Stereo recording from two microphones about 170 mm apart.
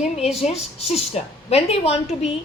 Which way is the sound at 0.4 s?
35° left (ahead or behind).